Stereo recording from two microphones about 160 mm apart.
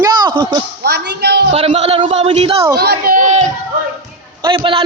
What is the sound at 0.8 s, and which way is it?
Speech, 90° right.